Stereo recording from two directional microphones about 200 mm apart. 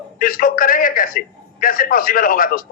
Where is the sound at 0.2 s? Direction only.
45° left (ahead or behind).